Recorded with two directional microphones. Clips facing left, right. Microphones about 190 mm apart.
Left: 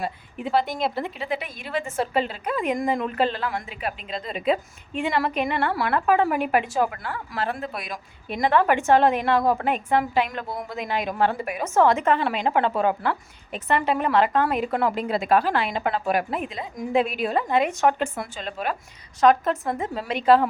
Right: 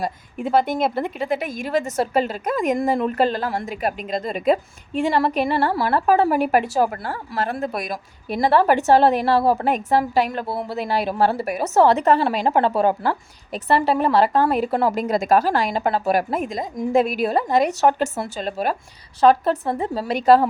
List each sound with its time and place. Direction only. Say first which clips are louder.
0.0 s a woman's voice: right 4 dB; 45° right (ahead or behind)